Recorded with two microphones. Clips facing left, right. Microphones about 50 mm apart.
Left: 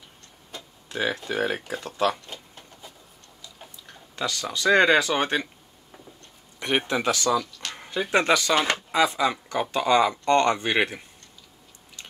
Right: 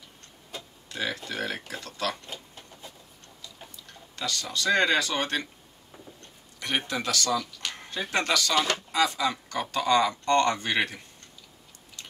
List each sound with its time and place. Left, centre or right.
0.8 s speech: left
2.2 s a sound: centre
3.8 s speech: centre